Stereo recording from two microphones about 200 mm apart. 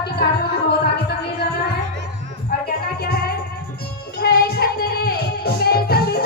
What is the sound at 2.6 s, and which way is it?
Music, 50° left (ahead or behind).